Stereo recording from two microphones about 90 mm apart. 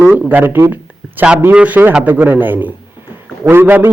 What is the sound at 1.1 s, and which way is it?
A man's voice, 10° right (ahead or behind).